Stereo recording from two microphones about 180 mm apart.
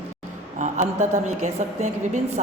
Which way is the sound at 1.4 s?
40° right (ahead or behind).